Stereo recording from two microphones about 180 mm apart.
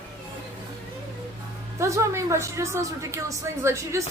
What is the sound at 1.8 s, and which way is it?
A woman's voice, 15° right (ahead or behind).